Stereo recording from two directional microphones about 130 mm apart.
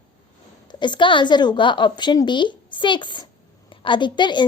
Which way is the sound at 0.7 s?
35° left (ahead or behind).